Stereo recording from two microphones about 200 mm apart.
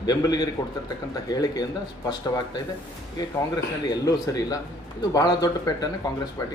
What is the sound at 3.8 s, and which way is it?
Speech, 20° left (ahead or behind).